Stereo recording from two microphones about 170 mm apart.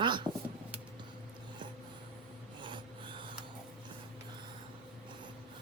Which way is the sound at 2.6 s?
30° right (ahead or behind).